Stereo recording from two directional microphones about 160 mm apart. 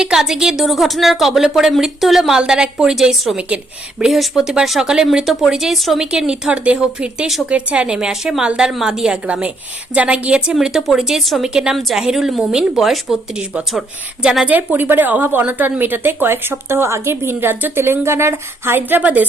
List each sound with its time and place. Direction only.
0.0 s a woman's voice: 5° right (ahead or behind)